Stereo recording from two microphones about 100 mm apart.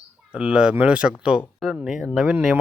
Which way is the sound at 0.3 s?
10° right (ahead or behind).